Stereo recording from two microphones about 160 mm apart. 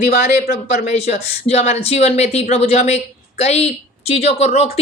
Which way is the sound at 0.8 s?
45° left (ahead or behind).